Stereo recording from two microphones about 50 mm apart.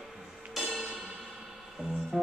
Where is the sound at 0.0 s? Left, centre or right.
Centre.